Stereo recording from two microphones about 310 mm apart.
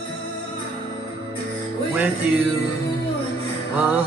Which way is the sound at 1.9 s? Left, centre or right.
Centre.